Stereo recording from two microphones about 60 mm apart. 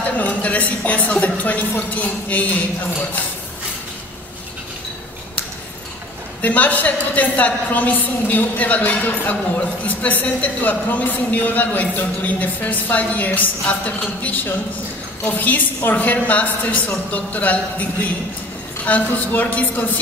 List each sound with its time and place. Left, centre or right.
0.2 s a woman's voice: left
6.4 s a woman's voice: left